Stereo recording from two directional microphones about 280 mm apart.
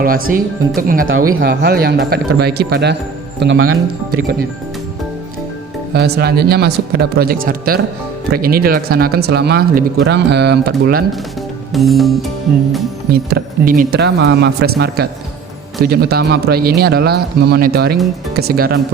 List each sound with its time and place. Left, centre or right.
0.0 s speech: right
1.0 s speech: right
1.4 s speech: right
5.9 s speech: right
11.7 s music: centre
13.1 s speech: right